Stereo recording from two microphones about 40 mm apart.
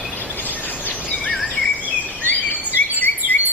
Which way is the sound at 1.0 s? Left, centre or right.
Left.